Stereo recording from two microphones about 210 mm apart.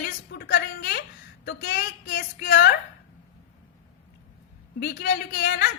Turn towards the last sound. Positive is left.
turn(degrees=45)  # may be behind; listen again after turning